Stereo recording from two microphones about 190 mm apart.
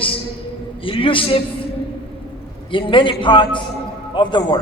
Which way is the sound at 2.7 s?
25° left (ahead or behind).